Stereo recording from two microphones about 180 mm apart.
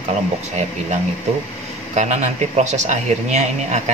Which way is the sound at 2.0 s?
40° right (ahead or behind).